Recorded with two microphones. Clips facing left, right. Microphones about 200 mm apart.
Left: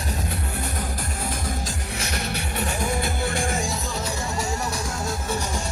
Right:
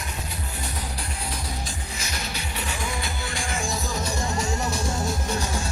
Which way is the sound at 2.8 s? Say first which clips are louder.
Left 6 dB; 45° left (ahead or behind).